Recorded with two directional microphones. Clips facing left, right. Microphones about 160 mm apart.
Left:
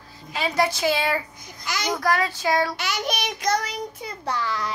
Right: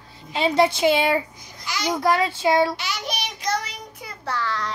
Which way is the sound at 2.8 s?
50° left (ahead or behind).